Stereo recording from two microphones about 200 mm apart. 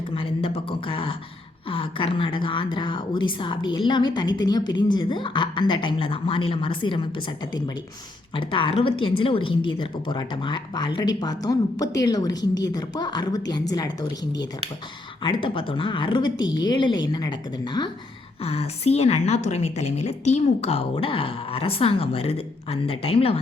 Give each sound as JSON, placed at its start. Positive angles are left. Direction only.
{"t": 0.1, "sound": "a woman's voice", "side_deg": 25}
{"t": 8.4, "sound": "a woman's voice", "side_deg": 25}
{"t": 18.4, "sound": "a woman's voice", "side_deg": 30}